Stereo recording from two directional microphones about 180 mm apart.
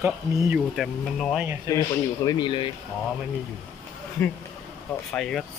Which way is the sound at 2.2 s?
20° left (ahead or behind).